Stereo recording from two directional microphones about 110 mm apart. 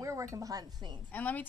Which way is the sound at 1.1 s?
15° left (ahead or behind).